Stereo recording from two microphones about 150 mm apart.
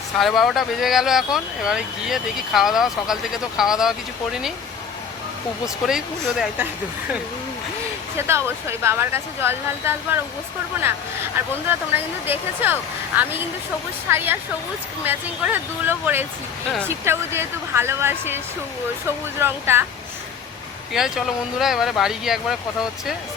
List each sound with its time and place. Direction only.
0.2 s speech: centre (ahead or behind)
5.6 s speech: centre (ahead or behind)
8.3 s speech: 15° right (ahead or behind)
11.3 s speech: 15° right (ahead or behind)
20.9 s speech: centre (ahead or behind)